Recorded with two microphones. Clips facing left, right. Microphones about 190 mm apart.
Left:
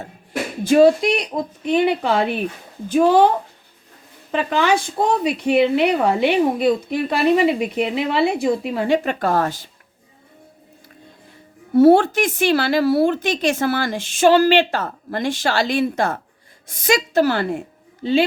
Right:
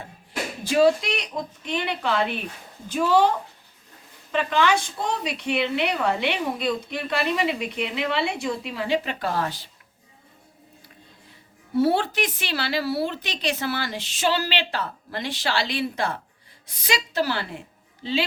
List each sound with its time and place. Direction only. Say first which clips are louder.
0.6 s a woman's voice: left 6 dB; 50° left (ahead or behind)
4.3 s a woman's voice: left 3 dB; 45° left (ahead or behind)
11.7 s a woman's voice: left 10 dB; 50° left (ahead or behind)